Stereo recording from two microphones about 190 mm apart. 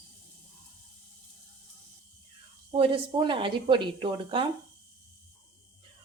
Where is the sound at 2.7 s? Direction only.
30° right (ahead or behind).